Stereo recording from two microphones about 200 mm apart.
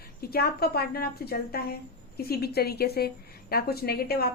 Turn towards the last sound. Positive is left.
turn(degrees=50)  # may be behind; listen again after turning